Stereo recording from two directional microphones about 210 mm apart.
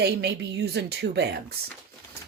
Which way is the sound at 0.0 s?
50° right (ahead or behind).